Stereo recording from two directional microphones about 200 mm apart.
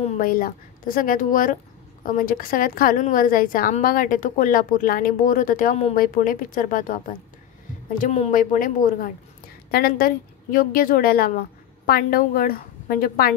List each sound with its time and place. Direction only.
0.2 s a woman's voice: 45° left (ahead or behind)
8.0 s a woman's voice: 35° left (ahead or behind)